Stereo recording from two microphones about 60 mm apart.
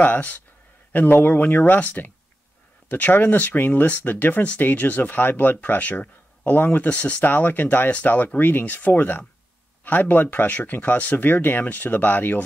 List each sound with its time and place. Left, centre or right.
0.0 s speech: left